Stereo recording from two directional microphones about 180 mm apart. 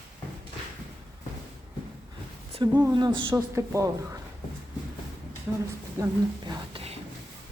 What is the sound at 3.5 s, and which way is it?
Speech, 15° right (ahead or behind).